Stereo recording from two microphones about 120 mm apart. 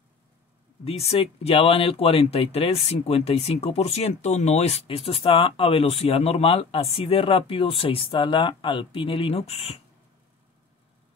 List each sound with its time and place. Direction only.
0.8 s speech: 55° left (ahead or behind)